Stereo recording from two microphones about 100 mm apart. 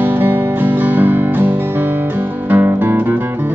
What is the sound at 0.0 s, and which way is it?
Music, 20° right (ahead or behind).